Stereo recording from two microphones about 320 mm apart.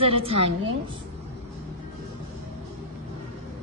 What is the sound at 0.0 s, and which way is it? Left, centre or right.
Speech, centre.